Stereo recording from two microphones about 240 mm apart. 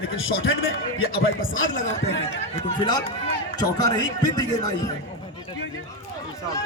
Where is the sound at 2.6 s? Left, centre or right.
Left.